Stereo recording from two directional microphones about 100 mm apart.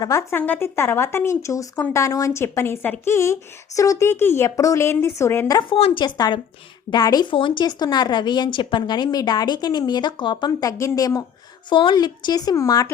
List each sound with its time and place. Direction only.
0.0 s speech: 35° left (ahead or behind)
0.3 s speech: 20° left (ahead or behind)
5.6 s a woman's voice: 65° left (ahead or behind); by 10.5 s 50° left (ahead or behind)
10.6 s speech: 30° left (ahead or behind)
11.7 s a woman's voice: 55° left (ahead or behind)
11.9 s speech: 45° left (ahead or behind)